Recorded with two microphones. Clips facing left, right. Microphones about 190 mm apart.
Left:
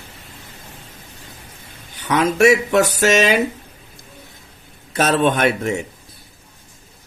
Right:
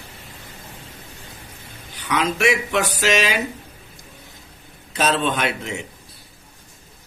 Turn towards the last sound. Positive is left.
turn(degrees=50)  # may be behind; listen again after turning